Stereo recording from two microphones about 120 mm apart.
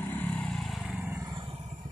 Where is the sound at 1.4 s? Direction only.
45° right (ahead or behind).